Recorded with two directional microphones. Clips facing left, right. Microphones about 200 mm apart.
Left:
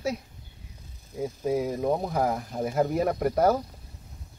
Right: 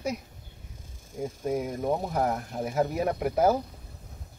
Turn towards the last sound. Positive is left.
turn(degrees=-5)  # may be behind; listen again after turning